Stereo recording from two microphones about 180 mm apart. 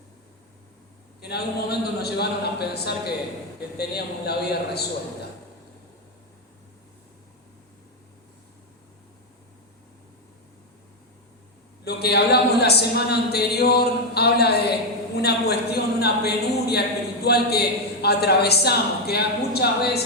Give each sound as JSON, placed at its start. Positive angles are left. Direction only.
{"t": 1.2, "sound": "a man's voice", "side_deg": 65}
{"t": 11.9, "sound": "a man's voice", "side_deg": 65}